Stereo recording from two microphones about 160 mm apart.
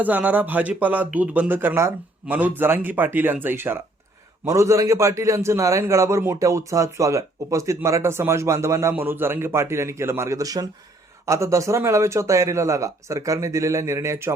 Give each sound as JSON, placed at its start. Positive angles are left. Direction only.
{"t": 0.0, "sound": "a man's voice", "side_deg": -10}